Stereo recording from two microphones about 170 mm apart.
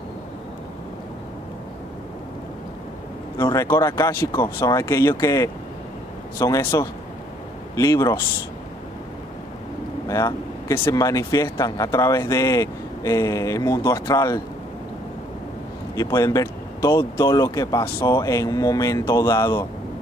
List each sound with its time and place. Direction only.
3.3 s speech: 25° left (ahead or behind)
3.6 s speech: 15° left (ahead or behind)
10.0 s speech: 20° left (ahead or behind)
15.9 s speech: 20° left (ahead or behind)